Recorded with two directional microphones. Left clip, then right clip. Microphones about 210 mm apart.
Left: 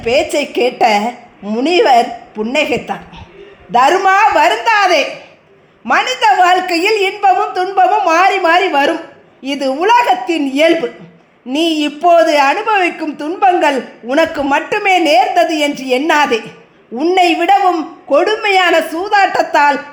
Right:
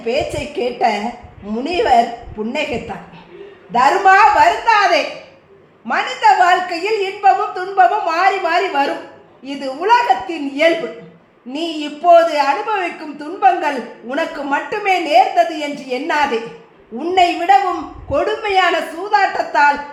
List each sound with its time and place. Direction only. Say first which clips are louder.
0.0 s a woman's voice: left 6 dB; 45° left (ahead or behind)